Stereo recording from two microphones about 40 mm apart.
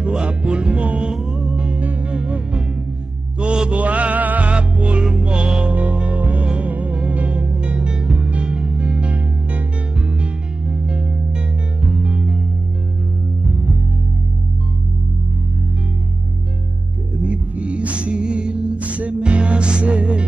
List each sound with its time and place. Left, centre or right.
0.2 s music: right
3.3 s mantra: right
3.7 s mantra: right
4.5 s music: right
6.4 s music: right
6.7 s music: right
12.0 s music: right
13.5 s music: centre
17.2 s music: right
18.8 s music: right